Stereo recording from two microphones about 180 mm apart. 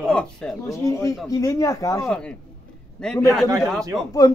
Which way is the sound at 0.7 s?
15° left (ahead or behind).